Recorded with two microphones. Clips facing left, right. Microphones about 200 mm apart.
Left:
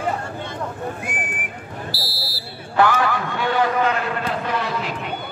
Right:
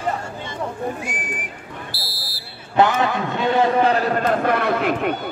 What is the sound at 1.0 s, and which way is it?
Speech, 55° left (ahead or behind).